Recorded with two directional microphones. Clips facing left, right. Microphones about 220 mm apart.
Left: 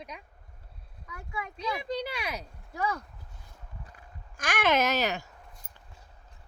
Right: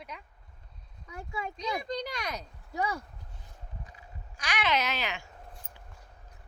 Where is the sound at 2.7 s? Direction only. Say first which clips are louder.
Even; 20° right (ahead or behind).